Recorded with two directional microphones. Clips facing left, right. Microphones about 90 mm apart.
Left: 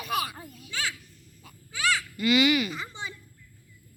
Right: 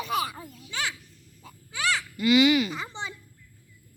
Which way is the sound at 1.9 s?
20° right (ahead or behind).